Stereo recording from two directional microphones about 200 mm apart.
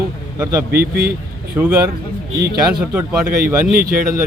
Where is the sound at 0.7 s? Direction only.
50° right (ahead or behind).